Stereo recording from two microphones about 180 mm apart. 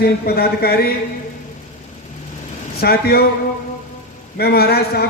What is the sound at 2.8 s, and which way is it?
Speech, 60° left (ahead or behind).